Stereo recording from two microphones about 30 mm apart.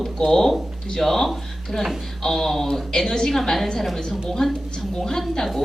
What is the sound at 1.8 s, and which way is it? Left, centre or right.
Speech, centre.